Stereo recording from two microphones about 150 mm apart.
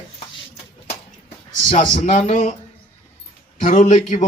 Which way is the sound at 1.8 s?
55° left (ahead or behind).